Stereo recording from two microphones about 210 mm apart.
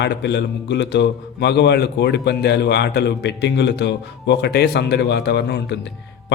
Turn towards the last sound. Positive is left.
turn(degrees=55)  # may be behind; listen again after turning